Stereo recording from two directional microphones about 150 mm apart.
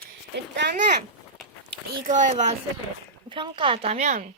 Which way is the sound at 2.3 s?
45° right (ahead or behind).